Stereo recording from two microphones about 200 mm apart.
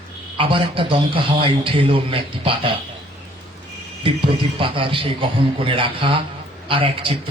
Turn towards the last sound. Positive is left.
turn(degrees=-25)  # may be behind; listen again after turning